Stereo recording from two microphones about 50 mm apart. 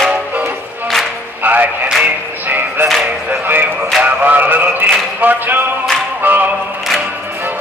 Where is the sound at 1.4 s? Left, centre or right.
Right.